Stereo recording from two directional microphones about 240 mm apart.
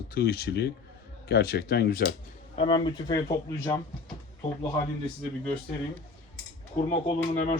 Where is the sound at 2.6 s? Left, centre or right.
Centre.